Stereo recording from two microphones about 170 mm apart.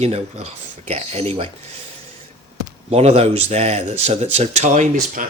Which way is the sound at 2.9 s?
40° right (ahead or behind).